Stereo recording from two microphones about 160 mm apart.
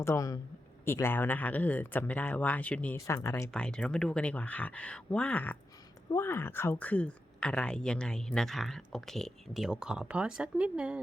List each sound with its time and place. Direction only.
0.0 s speech: 20° left (ahead or behind)
3.5 s speech: 5° left (ahead or behind)